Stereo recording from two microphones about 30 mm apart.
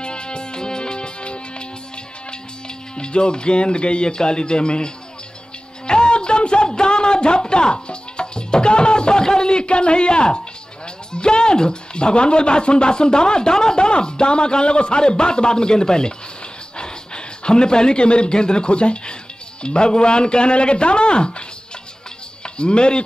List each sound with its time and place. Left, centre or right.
0.0 s music: left
3.0 s speech: left
5.9 s a sound: left
11.1 s a man's voice: left
22.4 s speech: left